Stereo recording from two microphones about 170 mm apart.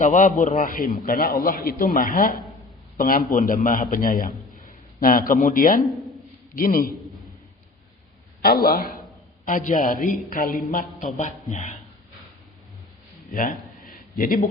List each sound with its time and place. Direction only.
0.0 s a man's voice: 50° left (ahead or behind)
8.4 s a man's voice: 65° left (ahead or behind)
9.5 s a man's voice: 50° left (ahead or behind)
14.2 s a man's voice: 55° left (ahead or behind)